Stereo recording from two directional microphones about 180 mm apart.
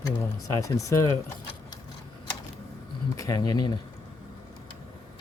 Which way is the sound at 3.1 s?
20° left (ahead or behind).